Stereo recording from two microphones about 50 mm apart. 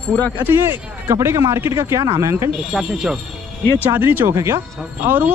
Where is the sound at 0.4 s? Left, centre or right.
Right.